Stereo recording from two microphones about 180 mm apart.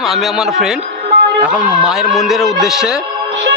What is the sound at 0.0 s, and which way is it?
Speech, centre (ahead or behind).